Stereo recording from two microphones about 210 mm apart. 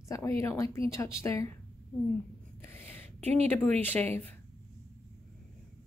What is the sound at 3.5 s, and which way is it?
Speech, 10° left (ahead or behind).